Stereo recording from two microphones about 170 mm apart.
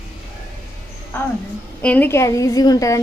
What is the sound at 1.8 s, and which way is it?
A woman's voice, 10° left (ahead or behind).